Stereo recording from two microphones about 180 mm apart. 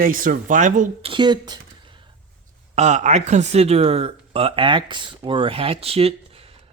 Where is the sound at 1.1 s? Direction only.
25° right (ahead or behind).